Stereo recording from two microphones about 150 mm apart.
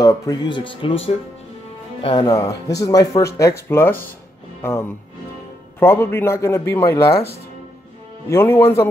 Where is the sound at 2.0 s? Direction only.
30° left (ahead or behind).